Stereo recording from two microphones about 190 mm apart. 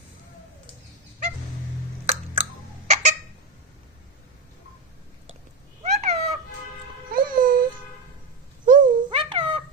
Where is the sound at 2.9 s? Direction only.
40° right (ahead or behind).